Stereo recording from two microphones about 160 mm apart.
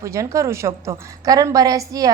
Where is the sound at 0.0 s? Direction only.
20° right (ahead or behind).